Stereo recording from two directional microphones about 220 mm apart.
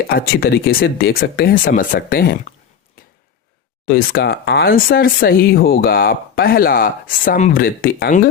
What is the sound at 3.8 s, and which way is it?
Speech, 45° left (ahead or behind).